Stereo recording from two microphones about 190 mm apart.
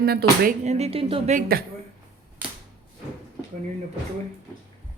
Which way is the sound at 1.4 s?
50° right (ahead or behind).